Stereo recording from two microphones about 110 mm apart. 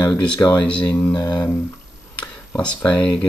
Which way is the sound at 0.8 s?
40° left (ahead or behind).